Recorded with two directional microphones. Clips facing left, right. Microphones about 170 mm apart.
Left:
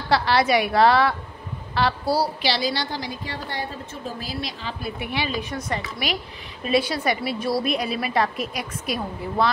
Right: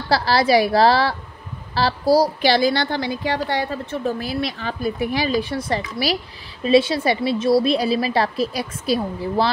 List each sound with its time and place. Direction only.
0.1 s a woman's voice: 35° right (ahead or behind); by 4.7 s 60° right (ahead or behind)
4.8 s a woman's voice: 40° right (ahead or behind)